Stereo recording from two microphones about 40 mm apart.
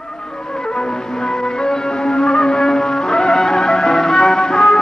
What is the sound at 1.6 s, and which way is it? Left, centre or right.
Music, centre.